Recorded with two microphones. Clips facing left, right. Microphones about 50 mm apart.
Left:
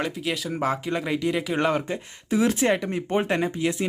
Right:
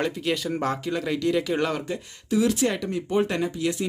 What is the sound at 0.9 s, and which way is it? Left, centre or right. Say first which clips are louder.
Speech: even; centre.